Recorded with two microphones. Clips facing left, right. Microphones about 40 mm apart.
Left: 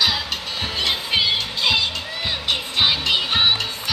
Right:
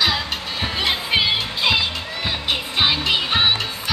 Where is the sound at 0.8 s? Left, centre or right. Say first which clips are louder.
Right 1 dB; centre.